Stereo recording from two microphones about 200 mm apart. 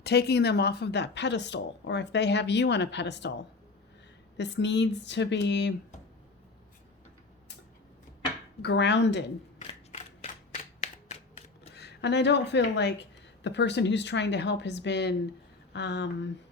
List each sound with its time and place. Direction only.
0.0 s speech: 55° left (ahead or behind)
8.6 s speech: 60° left (ahead or behind)
9.6 s a sound: 35° left (ahead or behind)
11.7 s a woman's voice: 55° left (ahead or behind)